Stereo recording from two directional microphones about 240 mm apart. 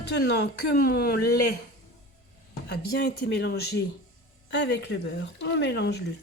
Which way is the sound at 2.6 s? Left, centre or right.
Left.